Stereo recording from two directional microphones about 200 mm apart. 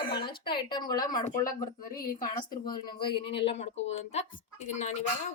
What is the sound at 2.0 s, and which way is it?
Speech, 45° left (ahead or behind).